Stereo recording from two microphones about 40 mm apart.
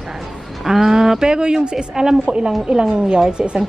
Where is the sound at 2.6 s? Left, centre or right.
Centre.